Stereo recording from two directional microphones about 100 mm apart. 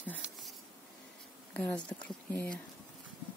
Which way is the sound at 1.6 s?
10° left (ahead or behind).